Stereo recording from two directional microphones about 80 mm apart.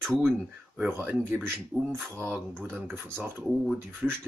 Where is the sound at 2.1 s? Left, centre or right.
Right.